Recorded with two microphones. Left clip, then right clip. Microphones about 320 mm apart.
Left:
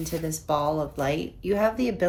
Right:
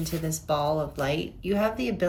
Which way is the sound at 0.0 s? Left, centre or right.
Centre.